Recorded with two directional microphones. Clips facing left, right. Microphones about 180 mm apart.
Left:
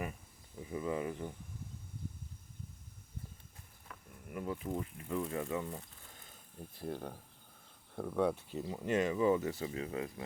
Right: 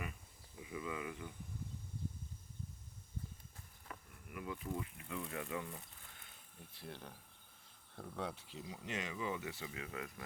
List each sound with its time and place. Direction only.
0.6 s speech: 40° left (ahead or behind)
3.9 s insect: 5° right (ahead or behind)
4.3 s speech: 35° left (ahead or behind)
6.1 s a sound: 40° left (ahead or behind)
7.9 s speech: 55° left (ahead or behind); by 10.1 s 30° left (ahead or behind)